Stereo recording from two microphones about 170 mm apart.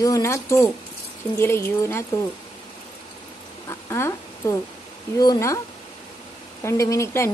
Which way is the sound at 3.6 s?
15° left (ahead or behind).